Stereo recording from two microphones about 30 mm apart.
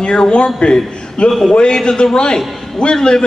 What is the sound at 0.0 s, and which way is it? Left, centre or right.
Speech, left.